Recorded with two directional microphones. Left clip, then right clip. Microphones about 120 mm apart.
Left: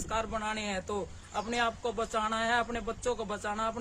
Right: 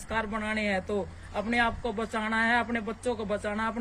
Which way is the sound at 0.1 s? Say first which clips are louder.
Right 2 dB; 50° left (ahead or behind).